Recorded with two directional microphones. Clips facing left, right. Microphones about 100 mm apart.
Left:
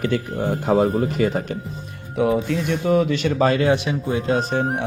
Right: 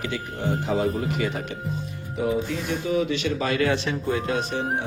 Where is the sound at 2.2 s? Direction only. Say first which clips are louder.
Left 5 dB; 70° left (ahead or behind); by 3.6 s 40° left (ahead or behind).